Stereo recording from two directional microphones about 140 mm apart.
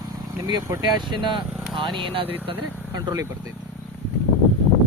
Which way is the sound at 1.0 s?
35° right (ahead or behind).